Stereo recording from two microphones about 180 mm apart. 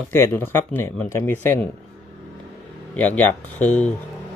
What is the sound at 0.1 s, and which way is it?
Speech, 10° left (ahead or behind).